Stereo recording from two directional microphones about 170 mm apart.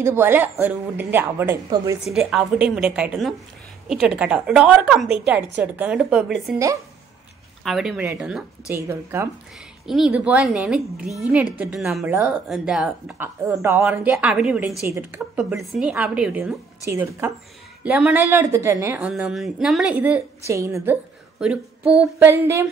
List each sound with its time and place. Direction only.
0.0 s a woman's voice: 15° right (ahead or behind)
7.6 s speech: centre (ahead or behind)
9.8 s speech: 5° right (ahead or behind)
12.1 s a woman's voice: 15° right (ahead or behind)
12.4 s speech: 5° right (ahead or behind)
13.6 s a woman's voice: 15° right (ahead or behind)
15.1 s a woman's voice: centre (ahead or behind); by 18.9 s 15° right (ahead or behind)
18.9 s a woman's voice: 5° right (ahead or behind)